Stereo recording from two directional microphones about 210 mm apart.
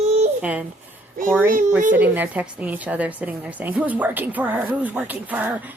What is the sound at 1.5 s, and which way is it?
Speech, 35° right (ahead or behind).